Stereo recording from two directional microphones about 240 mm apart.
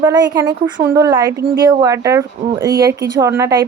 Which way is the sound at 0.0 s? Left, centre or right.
Centre.